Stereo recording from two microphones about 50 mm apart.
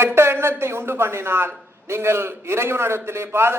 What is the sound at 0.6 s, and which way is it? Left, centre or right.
A man's voice, right.